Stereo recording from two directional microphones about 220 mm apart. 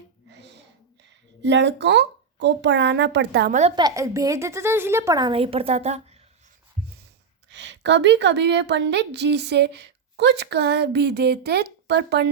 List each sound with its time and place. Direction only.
0.3 s a sound: 50° right (ahead or behind)
1.4 s a woman's voice: 50° right (ahead or behind)
3.8 s a woman's voice: 15° right (ahead or behind)
7.5 s a woman's voice: 55° right (ahead or behind)